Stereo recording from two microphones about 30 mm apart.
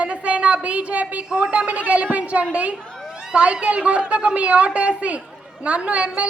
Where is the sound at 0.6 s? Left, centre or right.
Right.